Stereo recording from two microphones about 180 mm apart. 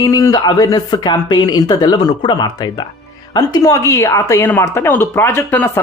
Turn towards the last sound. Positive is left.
turn(degrees=15)  # may be behind; listen again after turning